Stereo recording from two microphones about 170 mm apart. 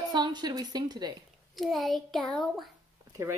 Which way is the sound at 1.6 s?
Centre (ahead or behind).